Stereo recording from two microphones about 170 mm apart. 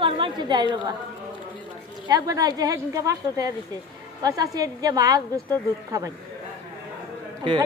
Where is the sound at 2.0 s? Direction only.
25° right (ahead or behind).